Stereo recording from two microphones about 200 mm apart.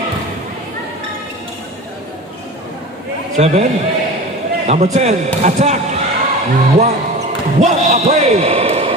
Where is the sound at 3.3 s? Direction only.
35° right (ahead or behind).